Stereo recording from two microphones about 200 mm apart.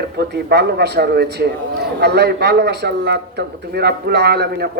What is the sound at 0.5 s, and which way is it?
Speech, 55° right (ahead or behind).